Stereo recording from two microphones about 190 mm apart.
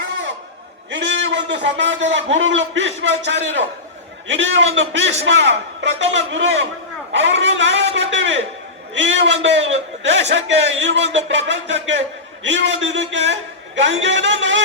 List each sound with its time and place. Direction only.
0.9 s a man's voice: 70° right (ahead or behind)
7.1 s a sound: 70° right (ahead or behind)
9.0 s a man's voice: 70° right (ahead or behind)